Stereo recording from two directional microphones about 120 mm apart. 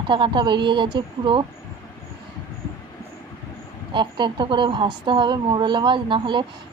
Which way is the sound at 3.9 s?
40° right (ahead or behind).